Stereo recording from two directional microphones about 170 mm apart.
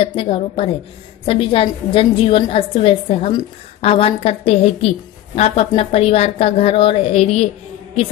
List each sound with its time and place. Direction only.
0.0 s a woman's voice: 30° left (ahead or behind)